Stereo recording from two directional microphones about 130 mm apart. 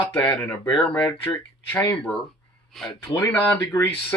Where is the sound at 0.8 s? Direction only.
5° left (ahead or behind).